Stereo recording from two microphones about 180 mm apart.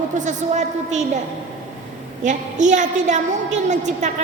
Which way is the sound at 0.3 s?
40° right (ahead or behind).